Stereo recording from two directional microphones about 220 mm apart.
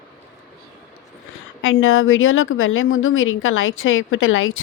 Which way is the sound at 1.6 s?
65° left (ahead or behind).